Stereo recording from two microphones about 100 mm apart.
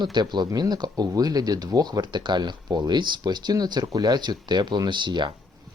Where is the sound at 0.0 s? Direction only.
45° right (ahead or behind).